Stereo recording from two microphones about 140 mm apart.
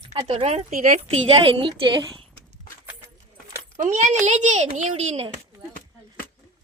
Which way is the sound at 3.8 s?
60° right (ahead or behind).